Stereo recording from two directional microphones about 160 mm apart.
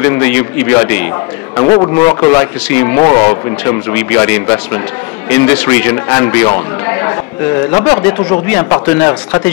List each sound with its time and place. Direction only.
0.0 s a man's voice: 15° left (ahead or behind)
1.6 s a man's voice: 30° left (ahead or behind)
3.9 s a man's voice: 15° left (ahead or behind)
7.7 s a man's voice: 25° left (ahead or behind)